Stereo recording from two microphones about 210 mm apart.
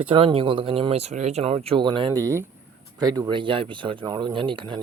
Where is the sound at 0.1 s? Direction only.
25° right (ahead or behind).